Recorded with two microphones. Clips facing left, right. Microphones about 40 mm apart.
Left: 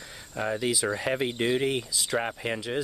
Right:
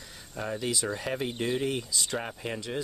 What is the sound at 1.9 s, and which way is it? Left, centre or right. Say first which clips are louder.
Speech: left 1 dB; centre.